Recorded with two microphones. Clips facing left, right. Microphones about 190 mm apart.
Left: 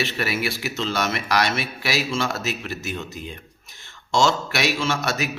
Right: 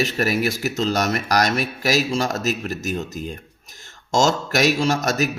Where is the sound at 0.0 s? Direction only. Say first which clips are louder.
Right 4 dB; 40° right (ahead or behind).